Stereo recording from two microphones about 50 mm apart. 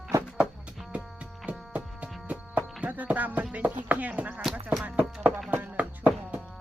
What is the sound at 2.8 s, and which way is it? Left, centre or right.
Music, right.